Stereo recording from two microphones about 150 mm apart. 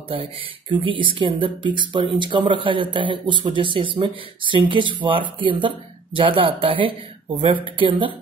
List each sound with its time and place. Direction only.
0.1 s speech: 35° right (ahead or behind)